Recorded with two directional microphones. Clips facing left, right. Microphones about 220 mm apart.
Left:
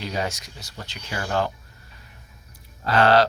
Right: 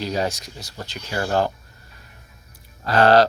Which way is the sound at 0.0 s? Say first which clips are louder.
Right 4 dB; 35° right (ahead or behind).